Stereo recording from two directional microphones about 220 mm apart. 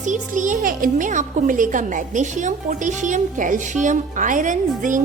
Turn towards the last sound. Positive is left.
turn(degrees=-35)  # may be behind; listen again after turning